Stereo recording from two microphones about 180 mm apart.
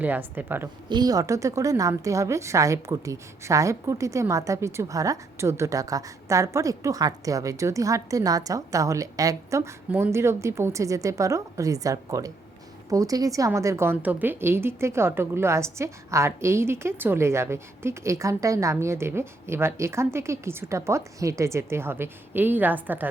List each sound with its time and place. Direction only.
0.0 s a woman's voice: 10° right (ahead or behind)
0.9 s a woman's voice: 20° right (ahead or behind)